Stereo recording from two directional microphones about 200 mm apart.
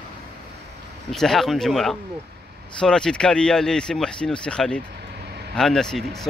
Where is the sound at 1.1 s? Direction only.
Centre (ahead or behind).